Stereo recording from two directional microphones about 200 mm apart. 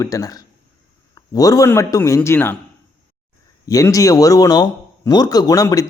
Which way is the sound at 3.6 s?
15° left (ahead or behind).